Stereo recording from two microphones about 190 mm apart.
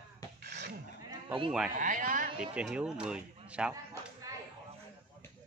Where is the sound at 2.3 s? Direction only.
5° right (ahead or behind).